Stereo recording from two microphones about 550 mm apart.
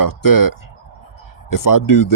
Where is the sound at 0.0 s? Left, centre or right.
Left.